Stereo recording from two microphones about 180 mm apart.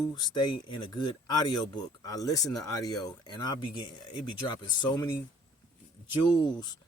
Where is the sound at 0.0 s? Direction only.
20° left (ahead or behind).